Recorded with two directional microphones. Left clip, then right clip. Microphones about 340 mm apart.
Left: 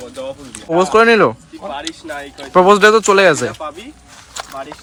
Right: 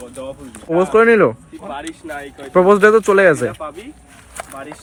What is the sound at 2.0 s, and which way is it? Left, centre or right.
Speech, left.